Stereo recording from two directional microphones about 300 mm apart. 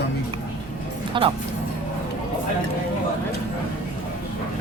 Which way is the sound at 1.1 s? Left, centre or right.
Centre.